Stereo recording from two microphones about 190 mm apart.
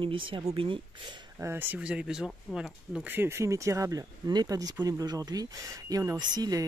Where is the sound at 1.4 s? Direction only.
10° right (ahead or behind).